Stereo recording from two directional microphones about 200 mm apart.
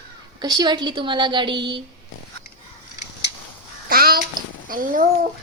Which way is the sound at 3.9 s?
45° right (ahead or behind).